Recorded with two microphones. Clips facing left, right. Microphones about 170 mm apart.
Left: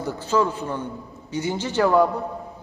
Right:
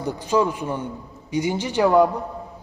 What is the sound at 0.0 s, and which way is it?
A man's voice, 15° right (ahead or behind).